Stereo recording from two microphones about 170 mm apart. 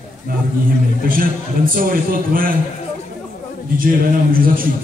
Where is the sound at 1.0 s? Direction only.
55° right (ahead or behind).